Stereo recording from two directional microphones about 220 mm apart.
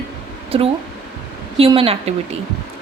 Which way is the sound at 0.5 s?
25° right (ahead or behind).